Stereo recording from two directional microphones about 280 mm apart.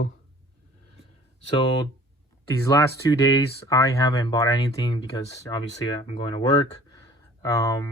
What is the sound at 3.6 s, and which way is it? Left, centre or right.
Speech, centre.